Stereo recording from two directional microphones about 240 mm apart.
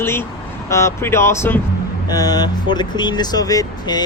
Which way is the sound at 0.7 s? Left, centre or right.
Centre.